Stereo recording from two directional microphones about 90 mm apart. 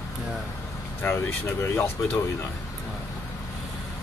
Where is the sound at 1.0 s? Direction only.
25° left (ahead or behind).